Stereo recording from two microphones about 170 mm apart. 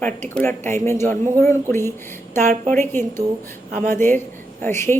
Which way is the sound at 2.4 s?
45° right (ahead or behind).